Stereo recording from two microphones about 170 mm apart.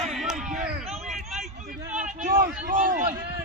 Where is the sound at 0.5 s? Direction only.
40° right (ahead or behind).